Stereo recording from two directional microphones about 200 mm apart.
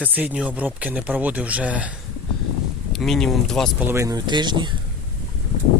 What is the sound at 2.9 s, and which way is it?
Speech, centre (ahead or behind).